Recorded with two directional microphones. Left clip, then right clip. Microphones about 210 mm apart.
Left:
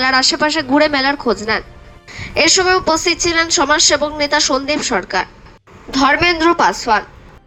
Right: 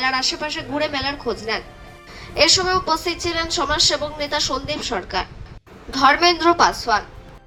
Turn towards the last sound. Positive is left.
turn(degrees=35)  # may be behind; listen again after turning